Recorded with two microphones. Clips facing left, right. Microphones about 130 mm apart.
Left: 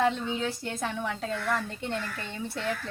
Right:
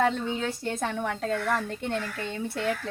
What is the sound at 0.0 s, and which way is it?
A woman's voice, 50° right (ahead or behind).